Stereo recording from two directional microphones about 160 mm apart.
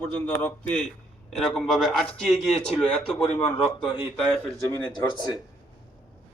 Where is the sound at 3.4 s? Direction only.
35° left (ahead or behind).